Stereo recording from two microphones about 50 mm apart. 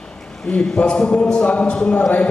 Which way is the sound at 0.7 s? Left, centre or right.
Centre.